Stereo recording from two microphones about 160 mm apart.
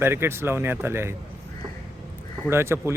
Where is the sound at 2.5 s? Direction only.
15° right (ahead or behind).